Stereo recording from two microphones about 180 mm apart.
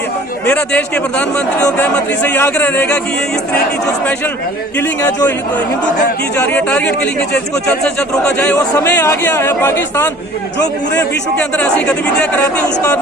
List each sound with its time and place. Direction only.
0.4 s speech: 5° left (ahead or behind)
4.8 s speech: 10° left (ahead or behind)
6.3 s speech: 10° left (ahead or behind)
9.0 s speech: 15° left (ahead or behind)
10.9 s speech: 5° left (ahead or behind)